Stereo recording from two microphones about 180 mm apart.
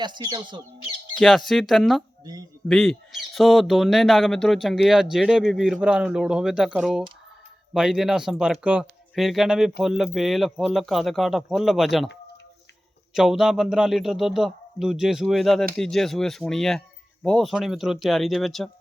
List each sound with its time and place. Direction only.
0.0 s speech: 25° right (ahead or behind)
1.1 s speech: centre (ahead or behind)
13.1 s speech: centre (ahead or behind)